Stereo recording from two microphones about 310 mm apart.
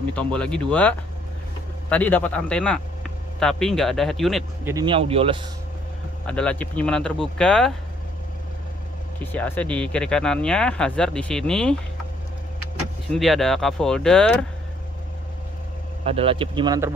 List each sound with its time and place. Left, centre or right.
0.1 s speech: centre
4.7 s speech: centre
6.2 s speech: centre
9.2 s speech: centre
13.1 s speech: centre
16.0 s speech: centre